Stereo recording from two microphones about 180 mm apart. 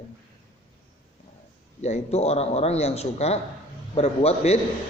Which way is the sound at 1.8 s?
35° left (ahead or behind).